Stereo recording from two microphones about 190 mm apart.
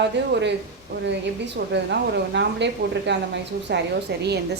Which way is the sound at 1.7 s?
65° right (ahead or behind).